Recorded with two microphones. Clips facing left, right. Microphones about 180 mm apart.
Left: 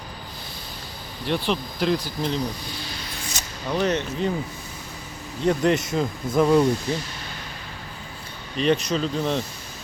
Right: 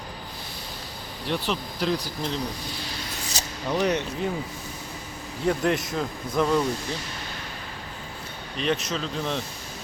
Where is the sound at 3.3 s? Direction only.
35° right (ahead or behind).